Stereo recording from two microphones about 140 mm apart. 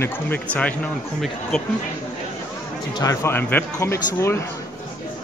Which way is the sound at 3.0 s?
20° left (ahead or behind).